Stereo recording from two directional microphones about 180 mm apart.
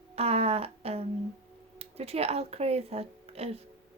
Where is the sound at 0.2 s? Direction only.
35° right (ahead or behind).